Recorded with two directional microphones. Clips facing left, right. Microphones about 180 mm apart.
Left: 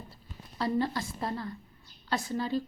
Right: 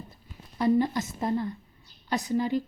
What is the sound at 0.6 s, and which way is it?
A woman's voice, 20° right (ahead or behind).